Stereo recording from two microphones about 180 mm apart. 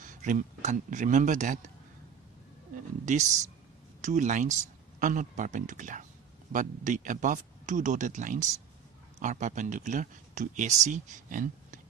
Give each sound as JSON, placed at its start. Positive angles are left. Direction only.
{"t": 0.0, "sound": "speech", "side_deg": -45}
{"t": 3.1, "sound": "speech", "side_deg": -40}